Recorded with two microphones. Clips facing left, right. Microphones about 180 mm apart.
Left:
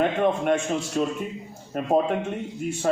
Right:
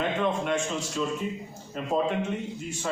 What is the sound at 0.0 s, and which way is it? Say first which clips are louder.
A man's voice: left 5 dB; 55° left (ahead or behind).